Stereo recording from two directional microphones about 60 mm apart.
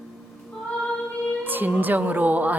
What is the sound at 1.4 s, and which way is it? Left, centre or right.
A woman's voice, right.